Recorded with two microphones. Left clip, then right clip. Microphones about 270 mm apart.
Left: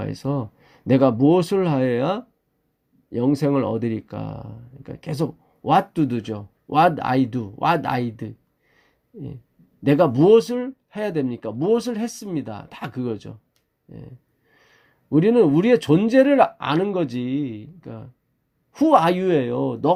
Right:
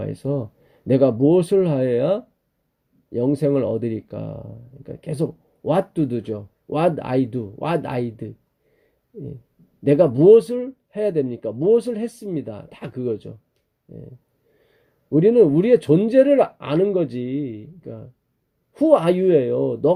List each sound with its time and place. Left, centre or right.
0.0 s speech: left
9.8 s speech: left
15.1 s speech: left